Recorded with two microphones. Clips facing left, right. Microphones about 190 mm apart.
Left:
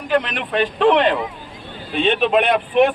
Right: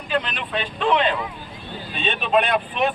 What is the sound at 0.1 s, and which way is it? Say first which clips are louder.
Speech: left 5 dB; 80° left.